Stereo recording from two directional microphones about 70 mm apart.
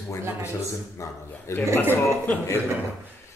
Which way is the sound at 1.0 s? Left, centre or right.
Left.